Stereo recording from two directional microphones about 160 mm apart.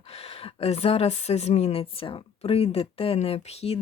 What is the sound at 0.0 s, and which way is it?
Speech, 40° left (ahead or behind).